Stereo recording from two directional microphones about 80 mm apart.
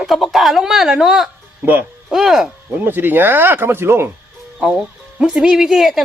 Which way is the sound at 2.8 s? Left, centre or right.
Right.